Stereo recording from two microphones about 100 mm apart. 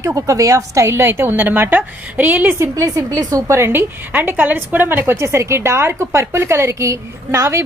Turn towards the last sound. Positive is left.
turn(degrees=-25)  # may be behind; listen again after turning